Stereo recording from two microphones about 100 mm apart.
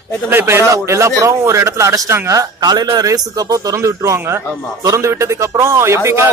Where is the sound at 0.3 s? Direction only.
25° right (ahead or behind).